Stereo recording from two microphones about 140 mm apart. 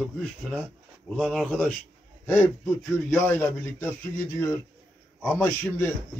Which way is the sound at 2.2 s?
20° left (ahead or behind).